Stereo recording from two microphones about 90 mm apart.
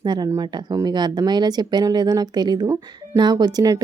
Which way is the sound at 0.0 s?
55° right (ahead or behind).